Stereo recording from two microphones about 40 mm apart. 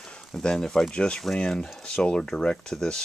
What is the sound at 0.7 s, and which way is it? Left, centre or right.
Speech, left.